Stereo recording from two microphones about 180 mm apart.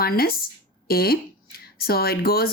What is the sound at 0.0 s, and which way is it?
Speech, 55° left (ahead or behind).